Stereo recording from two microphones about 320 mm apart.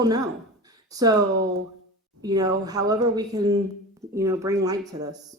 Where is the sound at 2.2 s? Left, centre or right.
Centre.